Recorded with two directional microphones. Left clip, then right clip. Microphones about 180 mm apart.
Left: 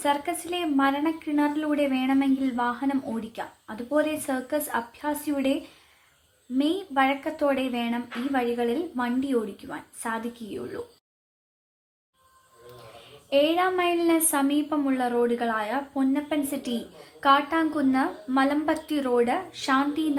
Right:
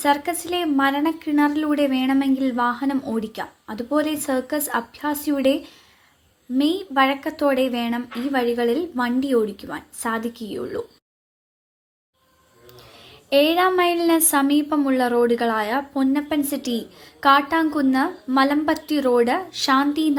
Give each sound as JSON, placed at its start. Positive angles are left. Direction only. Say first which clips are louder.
{"t": 0.0, "sound": "a woman's voice", "louder": "right 5 dB", "side_deg": -25}
{"t": 6.6, "sound": "a woman's voice", "louder": "right 5 dB", "side_deg": -25}
{"t": 13.3, "sound": "a woman's voice", "louder": "right 5 dB", "side_deg": -25}